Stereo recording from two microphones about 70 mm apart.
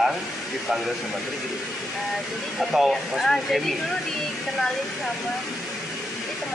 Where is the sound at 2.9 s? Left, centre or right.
Centre.